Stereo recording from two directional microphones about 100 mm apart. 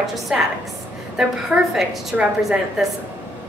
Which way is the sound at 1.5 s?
10° right (ahead or behind).